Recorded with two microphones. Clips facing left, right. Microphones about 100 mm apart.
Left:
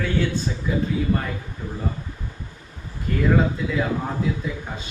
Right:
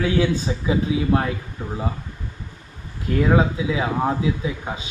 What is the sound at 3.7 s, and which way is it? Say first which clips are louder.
Speech: right 3 dB; 80° right.